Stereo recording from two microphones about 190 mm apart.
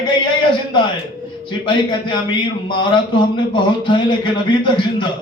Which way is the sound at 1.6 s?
25° left (ahead or behind).